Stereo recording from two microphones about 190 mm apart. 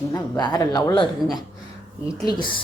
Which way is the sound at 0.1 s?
20° left (ahead or behind).